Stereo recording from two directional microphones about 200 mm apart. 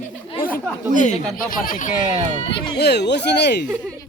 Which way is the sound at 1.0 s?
35° left (ahead or behind).